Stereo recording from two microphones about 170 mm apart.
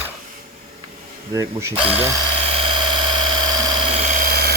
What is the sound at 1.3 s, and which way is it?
Speech, 20° right (ahead or behind).